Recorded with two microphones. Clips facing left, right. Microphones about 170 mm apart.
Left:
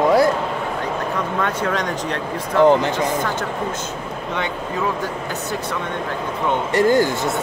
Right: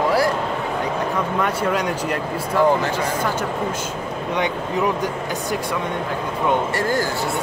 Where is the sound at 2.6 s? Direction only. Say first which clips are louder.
Left 4 dB; 20° left (ahead or behind).